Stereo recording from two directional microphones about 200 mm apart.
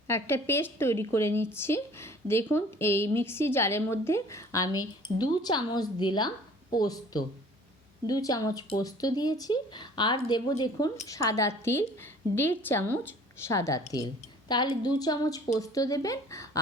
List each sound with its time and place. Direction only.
0.1 s speech: 10° left (ahead or behind)